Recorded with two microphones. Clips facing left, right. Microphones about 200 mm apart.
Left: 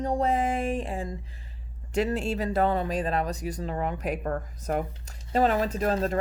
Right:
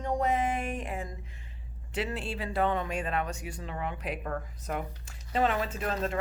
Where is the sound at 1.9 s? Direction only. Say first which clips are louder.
Left 7 dB; 45° left (ahead or behind).